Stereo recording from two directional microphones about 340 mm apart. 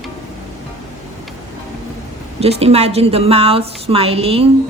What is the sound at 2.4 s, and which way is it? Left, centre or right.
Speech, centre.